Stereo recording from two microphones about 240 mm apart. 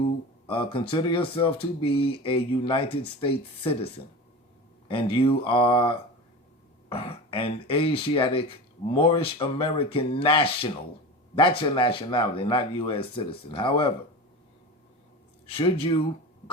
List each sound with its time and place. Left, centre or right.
0.4 s speech: left
4.9 s speech: left
15.4 s speech: left